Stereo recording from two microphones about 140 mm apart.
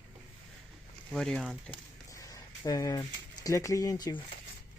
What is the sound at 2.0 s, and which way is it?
Speech, 25° left (ahead or behind).